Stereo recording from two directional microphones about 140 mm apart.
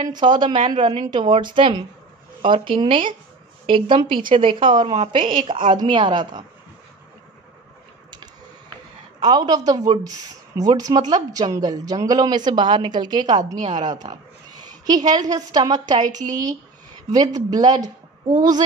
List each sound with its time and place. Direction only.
0.0 s a woman's voice: 30° right (ahead or behind)
9.2 s a woman's voice: 30° right (ahead or behind)